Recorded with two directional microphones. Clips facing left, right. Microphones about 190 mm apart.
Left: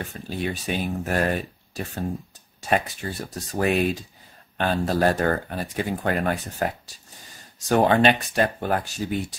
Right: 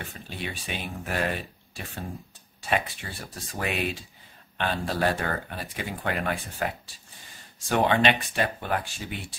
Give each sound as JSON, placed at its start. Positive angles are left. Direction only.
{"t": 0.3, "sound": "speech", "side_deg": 40}